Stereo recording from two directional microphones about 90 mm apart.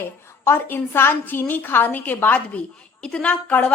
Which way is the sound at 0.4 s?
25° left (ahead or behind).